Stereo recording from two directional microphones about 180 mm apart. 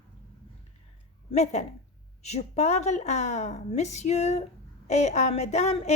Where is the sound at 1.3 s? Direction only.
40° left (ahead or behind).